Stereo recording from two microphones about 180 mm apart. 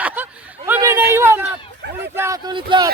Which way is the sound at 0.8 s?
15° right (ahead or behind).